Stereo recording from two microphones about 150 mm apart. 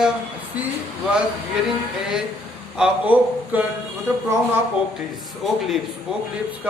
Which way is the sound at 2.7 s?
10° right (ahead or behind).